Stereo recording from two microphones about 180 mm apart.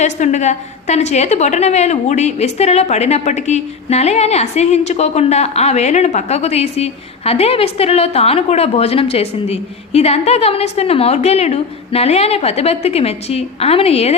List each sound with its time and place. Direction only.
0.0 s a woman's voice: 40° left (ahead or behind)